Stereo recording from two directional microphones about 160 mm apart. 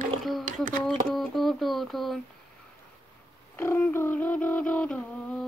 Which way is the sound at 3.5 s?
10° left (ahead or behind).